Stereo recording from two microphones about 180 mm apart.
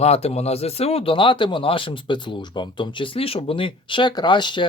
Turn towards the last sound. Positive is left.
turn(degrees=25)  # may be behind; listen again after turning